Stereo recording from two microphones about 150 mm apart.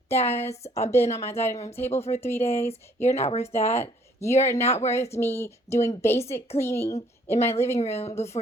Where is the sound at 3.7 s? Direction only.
15° left (ahead or behind).